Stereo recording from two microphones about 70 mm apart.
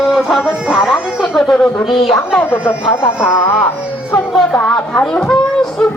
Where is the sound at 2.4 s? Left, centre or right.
Left.